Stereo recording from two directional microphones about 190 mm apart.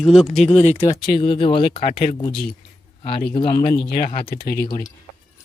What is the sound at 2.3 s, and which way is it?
Speech, 60° left (ahead or behind).